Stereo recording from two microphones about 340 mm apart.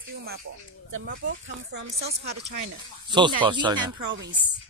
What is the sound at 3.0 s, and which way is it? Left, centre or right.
Speech, centre.